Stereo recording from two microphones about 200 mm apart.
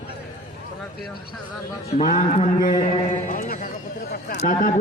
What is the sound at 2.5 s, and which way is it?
Mantra, 20° left (ahead or behind).